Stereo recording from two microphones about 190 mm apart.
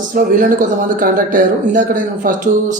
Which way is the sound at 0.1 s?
45° right (ahead or behind).